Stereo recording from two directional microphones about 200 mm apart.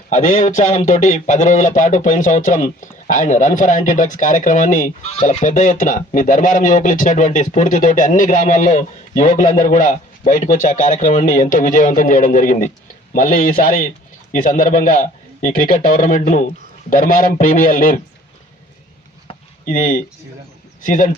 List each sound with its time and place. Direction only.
0.1 s a man's voice: 40° left (ahead or behind)
19.6 s a man's voice: 40° left (ahead or behind)